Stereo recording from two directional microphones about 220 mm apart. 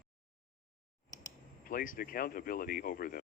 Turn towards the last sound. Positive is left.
turn(degrees=40)  # may be behind; listen again after turning